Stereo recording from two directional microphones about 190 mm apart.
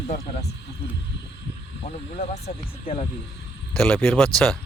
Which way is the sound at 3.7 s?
5° left (ahead or behind).